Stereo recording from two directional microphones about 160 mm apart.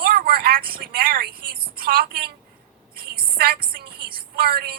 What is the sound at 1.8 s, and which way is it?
Speech, 70° right (ahead or behind).